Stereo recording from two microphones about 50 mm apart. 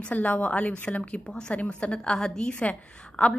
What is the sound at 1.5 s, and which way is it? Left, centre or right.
A woman's voice, left.